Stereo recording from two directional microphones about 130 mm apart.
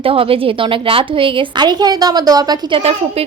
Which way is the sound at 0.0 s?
45° right (ahead or behind).